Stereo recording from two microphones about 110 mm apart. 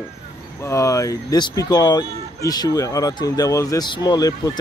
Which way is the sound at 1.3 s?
40° left (ahead or behind).